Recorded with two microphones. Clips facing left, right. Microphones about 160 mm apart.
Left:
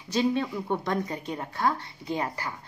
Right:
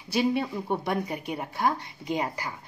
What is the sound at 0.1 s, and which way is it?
Speech, 10° right (ahead or behind).